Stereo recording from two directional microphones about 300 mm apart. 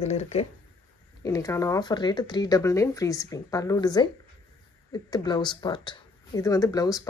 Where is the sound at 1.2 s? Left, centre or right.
Centre.